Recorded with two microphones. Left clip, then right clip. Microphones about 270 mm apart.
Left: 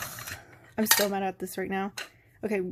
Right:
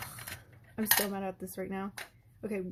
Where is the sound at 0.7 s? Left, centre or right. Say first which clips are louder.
Left 6 dB; left.